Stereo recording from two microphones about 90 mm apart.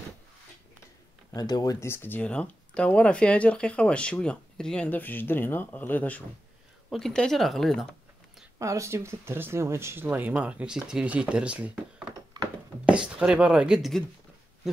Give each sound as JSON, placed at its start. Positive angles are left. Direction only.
{"t": 1.3, "sound": "speech", "side_deg": 45}
{"t": 1.9, "sound": "speech", "side_deg": 25}
{"t": 4.8, "sound": "speech", "side_deg": 20}
{"t": 6.9, "sound": "speech", "side_deg": 5}
{"t": 8.5, "sound": "speech", "side_deg": -35}
{"t": 12.8, "sound": "speech", "side_deg": -10}